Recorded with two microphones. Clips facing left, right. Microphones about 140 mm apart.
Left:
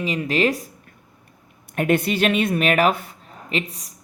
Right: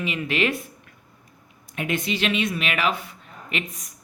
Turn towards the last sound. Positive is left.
turn(degrees=35)  # may be behind; listen again after turning